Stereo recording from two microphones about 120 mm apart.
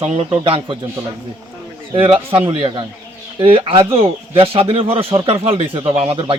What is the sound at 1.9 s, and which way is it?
Speech, 45° right (ahead or behind).